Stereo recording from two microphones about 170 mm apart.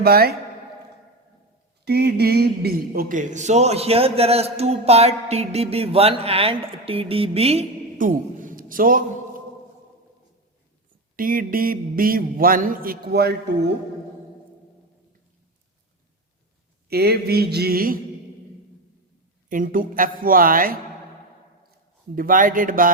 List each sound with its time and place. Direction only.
0.0 s a man's voice: 65° right (ahead or behind)
1.8 s a man's voice: 70° right (ahead or behind); by 7.6 s 35° right (ahead or behind)
7.9 s a sound: 50° right (ahead or behind)
11.2 s a man's voice: 55° right (ahead or behind); by 13.7 s 70° right (ahead or behind)
16.9 s speech: 70° right (ahead or behind)
19.5 s a man's voice: 50° right (ahead or behind)
22.1 s speech: 55° right (ahead or behind)